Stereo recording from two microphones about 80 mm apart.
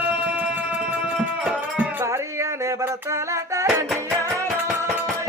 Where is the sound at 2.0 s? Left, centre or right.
Right.